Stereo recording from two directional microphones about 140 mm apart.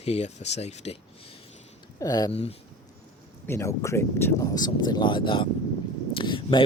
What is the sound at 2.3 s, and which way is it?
Speech, 45° left (ahead or behind).